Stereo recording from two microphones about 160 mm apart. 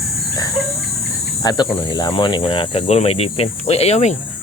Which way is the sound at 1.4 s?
25° left (ahead or behind).